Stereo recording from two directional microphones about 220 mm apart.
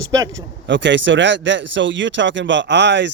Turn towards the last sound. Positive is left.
turn(degrees=-55)  # may be behind; listen again after turning